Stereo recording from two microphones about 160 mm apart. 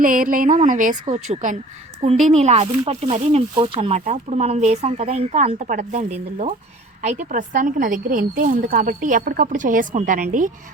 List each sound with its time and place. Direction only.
0.0 s a woman's voice: 55° right (ahead or behind)